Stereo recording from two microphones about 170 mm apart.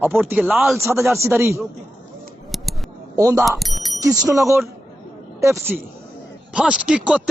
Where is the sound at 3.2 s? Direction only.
20° right (ahead or behind).